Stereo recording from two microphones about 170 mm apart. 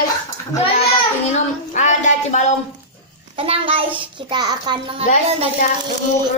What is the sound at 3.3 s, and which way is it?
A child's voice, 35° right (ahead or behind).